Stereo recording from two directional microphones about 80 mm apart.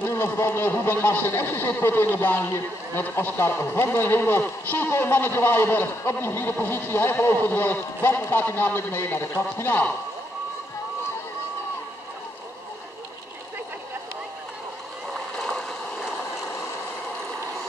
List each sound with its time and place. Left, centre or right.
0.1 s speech: left
15.3 s stream: centre